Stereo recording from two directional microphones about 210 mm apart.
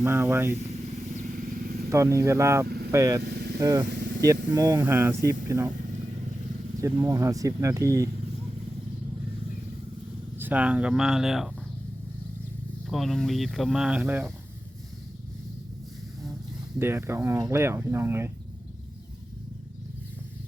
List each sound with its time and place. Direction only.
0.0 s speech: 10° right (ahead or behind)
1.1 s vehicle: 40° right (ahead or behind)
1.9 s speech: 15° right (ahead or behind)
2.6 s vehicle: 45° right (ahead or behind)
2.9 s speech: 15° right (ahead or behind)
3.2 s vehicle: 50° right (ahead or behind)
3.6 s speech: 15° right (ahead or behind)
3.8 s vehicle: 55° right (ahead or behind)
4.5 s speech: 15° right (ahead or behind)
6.8 s speech: 15° right (ahead or behind)
10.3 s speech: 10° right (ahead or behind)
12.9 s speech: centre (ahead or behind)
16.7 s speech: 10° right (ahead or behind)